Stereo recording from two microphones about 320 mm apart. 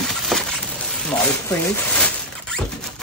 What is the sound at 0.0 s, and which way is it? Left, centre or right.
Coin, centre.